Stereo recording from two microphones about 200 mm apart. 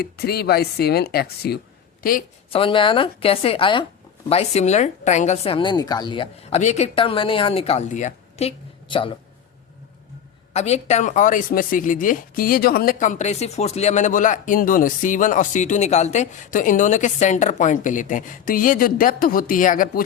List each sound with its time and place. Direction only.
0.0 s speech: 50° left (ahead or behind)
2.5 s a woman's voice: 25° left (ahead or behind)
10.5 s speech: 35° left (ahead or behind)